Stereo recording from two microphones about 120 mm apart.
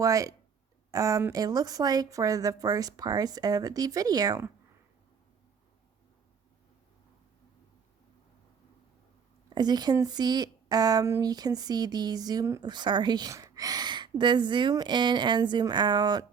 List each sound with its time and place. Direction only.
0.0 s speech: 30° right (ahead or behind)
9.6 s speech: 35° right (ahead or behind)